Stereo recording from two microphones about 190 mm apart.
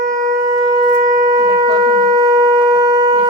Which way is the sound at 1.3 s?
20° right (ahead or behind).